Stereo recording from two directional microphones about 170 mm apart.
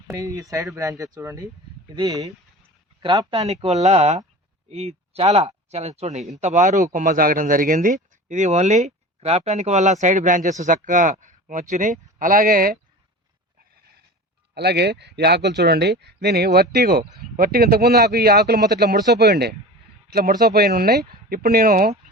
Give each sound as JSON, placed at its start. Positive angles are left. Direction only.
{"t": 0.1, "sound": "speech", "side_deg": -20}
{"t": 14.5, "sound": "speech", "side_deg": -75}